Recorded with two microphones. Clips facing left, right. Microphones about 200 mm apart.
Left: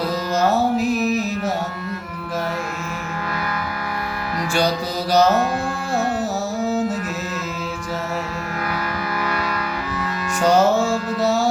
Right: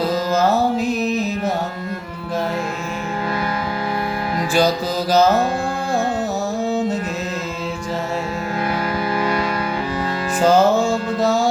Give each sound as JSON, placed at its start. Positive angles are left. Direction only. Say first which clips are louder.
{"t": 0.3, "sound": "music", "louder": "left 1 dB", "side_deg": 0}
{"t": 6.7, "sound": "music", "louder": "even", "side_deg": 0}
{"t": 9.1, "sound": "music", "louder": "right 5 dB", "side_deg": -30}
{"t": 10.4, "sound": "music", "louder": "right 2 dB", "side_deg": 0}